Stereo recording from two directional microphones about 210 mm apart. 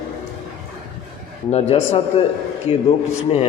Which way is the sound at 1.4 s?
30° left (ahead or behind).